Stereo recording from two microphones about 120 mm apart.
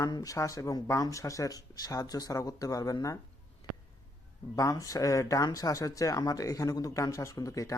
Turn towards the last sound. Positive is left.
turn(degrees=25)  # may be behind; listen again after turning